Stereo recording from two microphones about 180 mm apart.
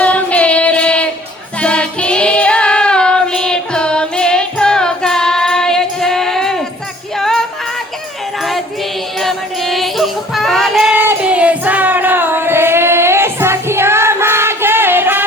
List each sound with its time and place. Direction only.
0.0 s child singing: 5° left (ahead or behind)
1.6 s music: 5° left (ahead or behind)
9.2 s music: centre (ahead or behind)